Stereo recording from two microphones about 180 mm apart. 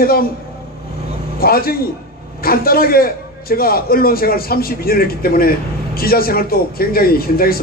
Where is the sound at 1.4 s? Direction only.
55° left (ahead or behind).